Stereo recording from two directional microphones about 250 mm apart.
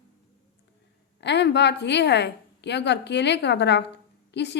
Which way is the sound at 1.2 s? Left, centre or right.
Left.